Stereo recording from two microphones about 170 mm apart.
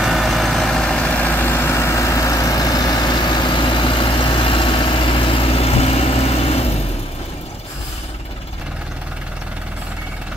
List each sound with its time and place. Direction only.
0.0 s vehicle: centre (ahead or behind); by 6.8 s 35° left (ahead or behind)